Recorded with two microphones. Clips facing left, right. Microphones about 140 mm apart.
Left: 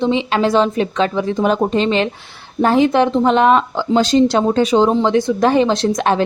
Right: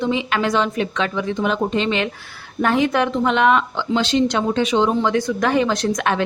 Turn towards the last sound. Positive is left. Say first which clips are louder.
# left 4 dB
turn(degrees=30)  # may be behind; listen again after turning